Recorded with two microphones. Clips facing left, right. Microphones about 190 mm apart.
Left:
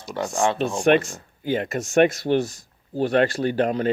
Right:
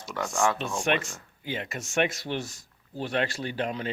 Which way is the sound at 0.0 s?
35° left (ahead or behind).